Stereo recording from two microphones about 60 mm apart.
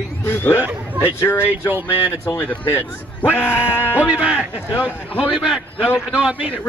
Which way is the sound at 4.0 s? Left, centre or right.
Centre.